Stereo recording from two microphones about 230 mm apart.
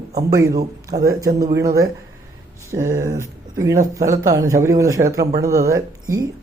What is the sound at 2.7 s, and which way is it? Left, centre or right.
Speech, centre.